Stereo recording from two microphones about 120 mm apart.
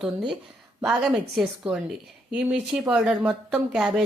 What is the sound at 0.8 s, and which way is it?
A woman's voice, 10° right (ahead or behind).